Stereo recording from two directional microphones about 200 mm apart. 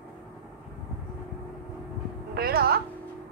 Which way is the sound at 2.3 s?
50° right (ahead or behind).